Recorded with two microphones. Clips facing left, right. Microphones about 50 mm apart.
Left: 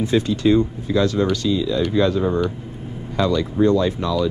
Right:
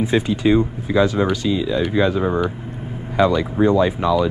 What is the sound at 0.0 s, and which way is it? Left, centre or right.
Speech, centre.